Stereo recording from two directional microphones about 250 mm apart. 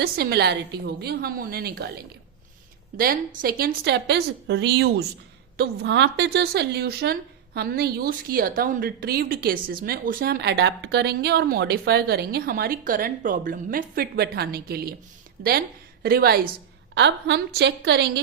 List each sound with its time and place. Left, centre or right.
0.0 s a woman's voice: right
3.0 s a woman's voice: right